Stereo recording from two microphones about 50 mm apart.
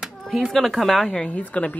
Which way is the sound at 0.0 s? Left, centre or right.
Centre.